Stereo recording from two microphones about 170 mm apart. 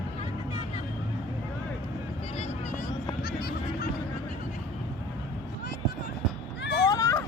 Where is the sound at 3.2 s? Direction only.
65° left (ahead or behind).